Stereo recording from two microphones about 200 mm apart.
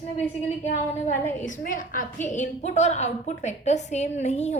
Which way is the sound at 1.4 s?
40° left (ahead or behind).